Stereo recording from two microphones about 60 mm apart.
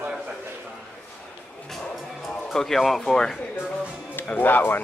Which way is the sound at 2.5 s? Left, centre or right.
Centre.